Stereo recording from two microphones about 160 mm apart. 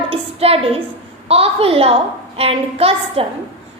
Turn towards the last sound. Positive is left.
turn(degrees=-40)  # may be behind; listen again after turning